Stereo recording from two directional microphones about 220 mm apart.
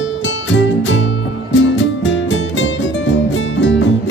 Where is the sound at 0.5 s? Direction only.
55° left (ahead or behind).